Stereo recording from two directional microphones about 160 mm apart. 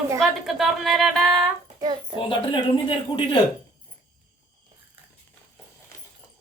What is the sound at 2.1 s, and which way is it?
A woman's voice, 30° left (ahead or behind).